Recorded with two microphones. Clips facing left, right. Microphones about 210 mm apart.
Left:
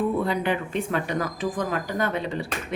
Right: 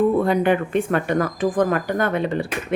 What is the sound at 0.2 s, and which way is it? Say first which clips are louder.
A woman's voice: right 7 dB; 50° right (ahead or behind).